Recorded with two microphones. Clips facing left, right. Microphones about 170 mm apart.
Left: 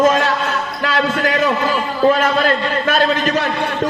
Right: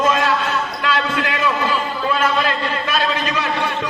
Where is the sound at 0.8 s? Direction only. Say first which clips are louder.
Left 5 dB; 45° left (ahead or behind).